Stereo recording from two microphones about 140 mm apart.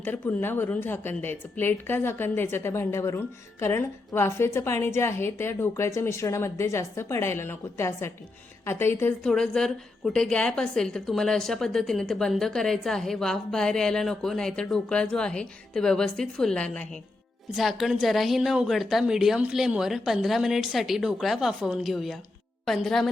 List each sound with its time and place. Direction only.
0.0 s a woman's voice: 15° left (ahead or behind)
9.2 s a woman's voice: 5° left (ahead or behind)